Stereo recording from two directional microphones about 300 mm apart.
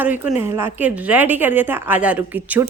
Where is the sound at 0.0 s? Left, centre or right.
Centre.